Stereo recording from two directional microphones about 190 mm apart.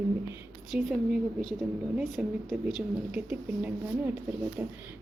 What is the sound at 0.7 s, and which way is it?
A woman's voice, centre (ahead or behind).